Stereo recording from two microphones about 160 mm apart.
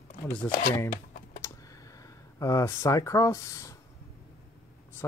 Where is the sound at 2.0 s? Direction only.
20° left (ahead or behind).